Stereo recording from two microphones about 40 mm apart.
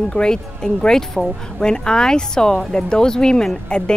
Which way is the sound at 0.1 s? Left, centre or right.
Centre.